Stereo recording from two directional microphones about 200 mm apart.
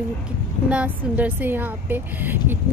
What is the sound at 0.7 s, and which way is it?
A woman's voice, 5° right (ahead or behind).